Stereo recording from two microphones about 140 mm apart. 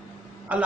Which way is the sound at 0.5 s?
10° right (ahead or behind).